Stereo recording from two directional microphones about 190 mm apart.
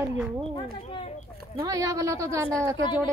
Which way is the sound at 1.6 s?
15° right (ahead or behind).